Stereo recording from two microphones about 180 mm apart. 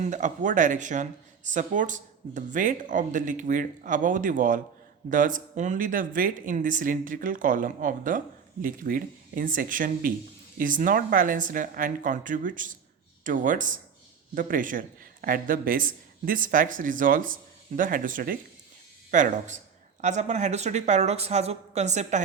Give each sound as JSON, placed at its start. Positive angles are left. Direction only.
{"t": 0.0, "sound": "a woman's voice", "side_deg": -45}